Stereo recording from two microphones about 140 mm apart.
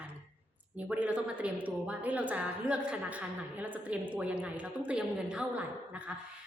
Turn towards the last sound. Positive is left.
turn(degrees=-10)  # may be behind; listen again after turning